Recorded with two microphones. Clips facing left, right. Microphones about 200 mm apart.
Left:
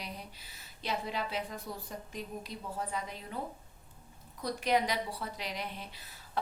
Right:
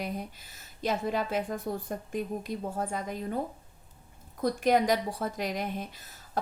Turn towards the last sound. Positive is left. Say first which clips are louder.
# right 3 dB
turn(degrees=-45)  # may be behind; listen again after turning